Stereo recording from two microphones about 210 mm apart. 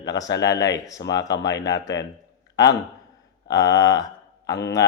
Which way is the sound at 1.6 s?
15° left (ahead or behind).